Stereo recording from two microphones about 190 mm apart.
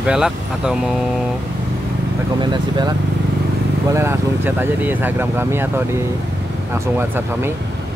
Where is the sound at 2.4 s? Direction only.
25° right (ahead or behind).